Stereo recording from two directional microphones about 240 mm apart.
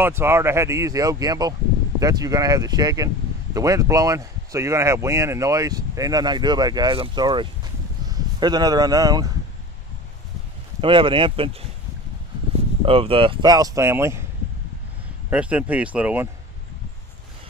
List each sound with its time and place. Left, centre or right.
0.0 s speech: centre
10.8 s speech: right
12.8 s speech: right
15.2 s speech: centre